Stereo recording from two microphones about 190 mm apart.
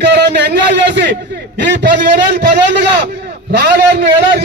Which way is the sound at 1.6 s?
65° right (ahead or behind).